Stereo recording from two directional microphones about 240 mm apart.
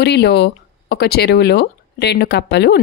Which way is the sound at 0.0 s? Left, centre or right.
Left.